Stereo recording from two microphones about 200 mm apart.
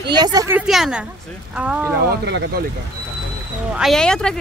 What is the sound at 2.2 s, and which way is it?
Speech, 55° right (ahead or behind).